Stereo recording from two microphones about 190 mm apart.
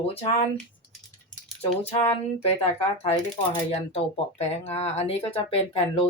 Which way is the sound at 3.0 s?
25° left (ahead or behind).